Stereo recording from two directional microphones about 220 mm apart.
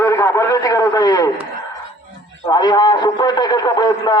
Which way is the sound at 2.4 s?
15° left (ahead or behind).